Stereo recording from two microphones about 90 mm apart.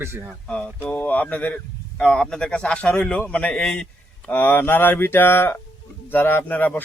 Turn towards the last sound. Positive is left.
turn(degrees=20)  # may be behind; listen again after turning